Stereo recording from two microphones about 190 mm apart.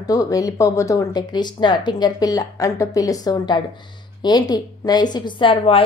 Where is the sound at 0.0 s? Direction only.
20° left (ahead or behind).